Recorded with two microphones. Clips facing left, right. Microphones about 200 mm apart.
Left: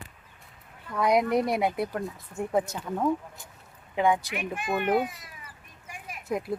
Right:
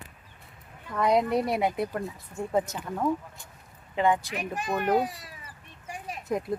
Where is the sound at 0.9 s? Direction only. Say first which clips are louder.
Even; 10° left (ahead or behind).